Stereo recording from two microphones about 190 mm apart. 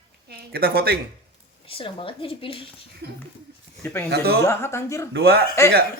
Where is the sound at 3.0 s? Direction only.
60° right (ahead or behind).